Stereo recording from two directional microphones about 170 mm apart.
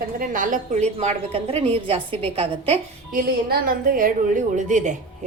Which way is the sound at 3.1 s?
55° right (ahead or behind).